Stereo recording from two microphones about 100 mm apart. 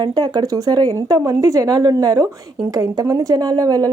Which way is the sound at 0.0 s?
45° right (ahead or behind).